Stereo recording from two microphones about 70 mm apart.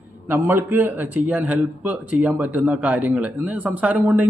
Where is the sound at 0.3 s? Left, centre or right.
Right.